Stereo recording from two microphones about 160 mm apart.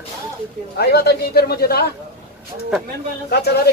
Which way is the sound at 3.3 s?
90° left.